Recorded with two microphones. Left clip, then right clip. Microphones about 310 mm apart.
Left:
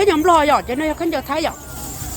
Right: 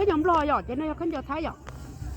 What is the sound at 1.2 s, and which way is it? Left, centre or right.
Speech, centre.